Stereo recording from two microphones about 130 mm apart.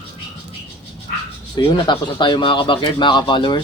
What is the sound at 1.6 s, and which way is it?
Speech, 40° left (ahead or behind).